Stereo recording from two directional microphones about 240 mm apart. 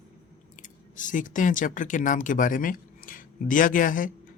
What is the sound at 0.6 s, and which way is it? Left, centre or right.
Speech, left.